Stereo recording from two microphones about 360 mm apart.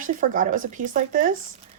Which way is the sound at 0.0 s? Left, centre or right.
Right.